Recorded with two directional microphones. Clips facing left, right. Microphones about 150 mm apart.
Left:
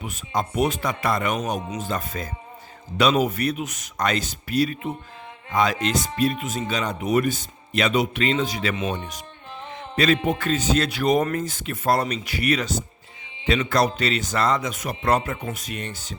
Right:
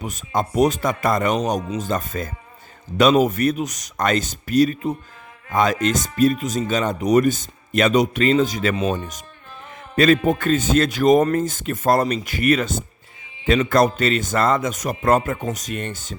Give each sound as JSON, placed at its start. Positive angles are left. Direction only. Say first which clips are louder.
{"t": 0.0, "sound": "a man's voice", "louder": "right 3 dB", "side_deg": -40}